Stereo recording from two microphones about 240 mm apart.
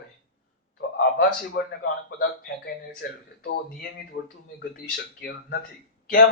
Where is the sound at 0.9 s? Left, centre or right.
Left.